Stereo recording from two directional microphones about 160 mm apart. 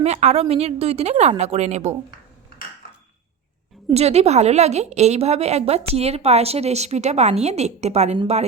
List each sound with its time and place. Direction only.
0.0 s a woman's voice: 45° right (ahead or behind)
3.8 s a woman's voice: 40° right (ahead or behind)